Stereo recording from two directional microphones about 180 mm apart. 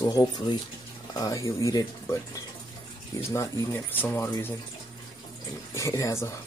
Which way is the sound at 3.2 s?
15° left (ahead or behind).